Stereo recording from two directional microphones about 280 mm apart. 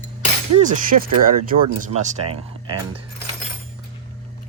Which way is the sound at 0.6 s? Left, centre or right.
Right.